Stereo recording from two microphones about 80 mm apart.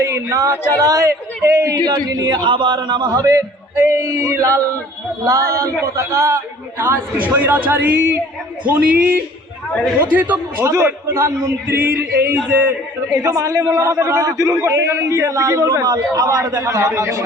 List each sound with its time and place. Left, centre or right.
0.0 s singing: right
0.8 s speech: right
1.8 s a man's voice: right; by 10.2 s centre
10.6 s a man's voice: right
13.2 s a man's voice: right